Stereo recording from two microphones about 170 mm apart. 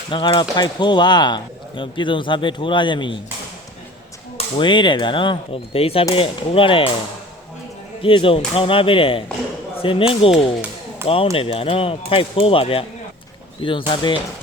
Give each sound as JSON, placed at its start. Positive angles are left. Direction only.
{"t": 0.1, "sound": "speech", "side_deg": 25}
{"t": 4.4, "sound": "speech", "side_deg": 30}
{"t": 8.0, "sound": "speech", "side_deg": 30}